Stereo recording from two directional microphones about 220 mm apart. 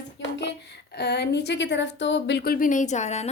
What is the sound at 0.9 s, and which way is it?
Speech, 50° left (ahead or behind).